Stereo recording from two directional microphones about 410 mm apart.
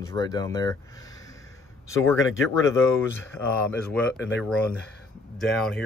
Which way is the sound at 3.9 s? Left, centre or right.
Centre.